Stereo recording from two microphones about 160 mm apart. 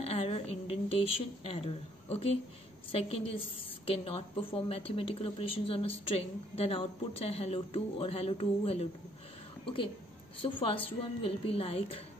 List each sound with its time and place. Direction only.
0.0 s a woman's voice: 40° left (ahead or behind)
10.4 s a woman's voice: 35° left (ahead or behind)